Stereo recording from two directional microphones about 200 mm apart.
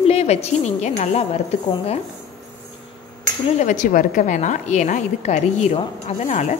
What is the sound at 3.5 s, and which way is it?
A woman's voice, 40° left (ahead or behind).